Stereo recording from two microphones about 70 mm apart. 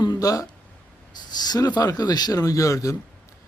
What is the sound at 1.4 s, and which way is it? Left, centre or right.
A man's voice, left.